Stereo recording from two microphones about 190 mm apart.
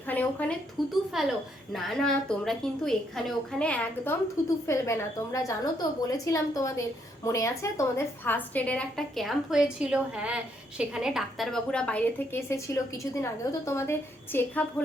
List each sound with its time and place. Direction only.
0.1 s a woman's voice: 10° left (ahead or behind)